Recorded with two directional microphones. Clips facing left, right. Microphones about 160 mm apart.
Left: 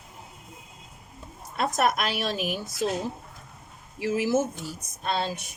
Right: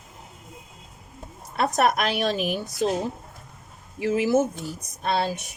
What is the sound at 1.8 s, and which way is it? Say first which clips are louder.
Speech: right 4 dB; 50° right (ahead or behind).